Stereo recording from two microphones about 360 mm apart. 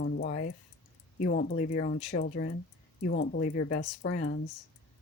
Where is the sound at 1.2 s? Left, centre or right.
Left.